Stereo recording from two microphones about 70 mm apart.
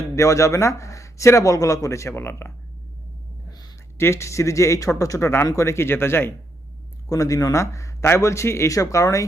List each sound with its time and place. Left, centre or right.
0.2 s a man's voice: left
3.9 s a man's voice: left
5.6 s speech: left
7.1 s a man's voice: left